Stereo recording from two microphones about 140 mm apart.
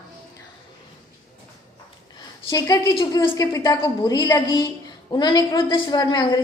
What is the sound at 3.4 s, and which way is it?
A woman's voice, 25° left (ahead or behind).